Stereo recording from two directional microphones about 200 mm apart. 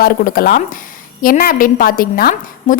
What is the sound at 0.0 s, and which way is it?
A woman's voice, 45° left (ahead or behind).